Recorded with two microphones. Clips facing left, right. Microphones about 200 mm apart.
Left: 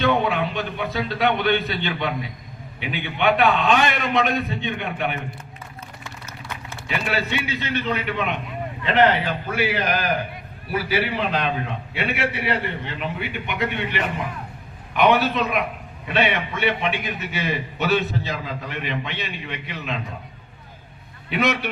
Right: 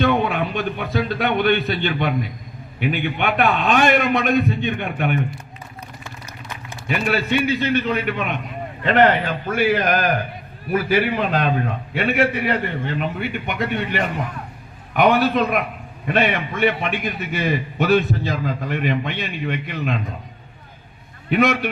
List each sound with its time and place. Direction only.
0.0 s a sound: 50° right (ahead or behind)
1.0 s a man's voice: 50° right (ahead or behind)
6.8 s a man's voice: 50° right (ahead or behind)
21.2 s a man's voice: 50° right (ahead or behind)